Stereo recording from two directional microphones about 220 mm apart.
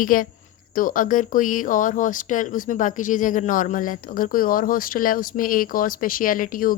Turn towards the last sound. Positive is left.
turn(degrees=40)  # may be behind; listen again after turning